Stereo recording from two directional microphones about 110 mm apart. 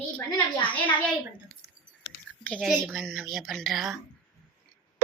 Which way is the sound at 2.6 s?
Centre (ahead or behind).